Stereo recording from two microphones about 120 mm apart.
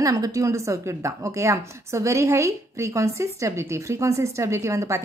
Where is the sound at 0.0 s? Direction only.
30° right (ahead or behind).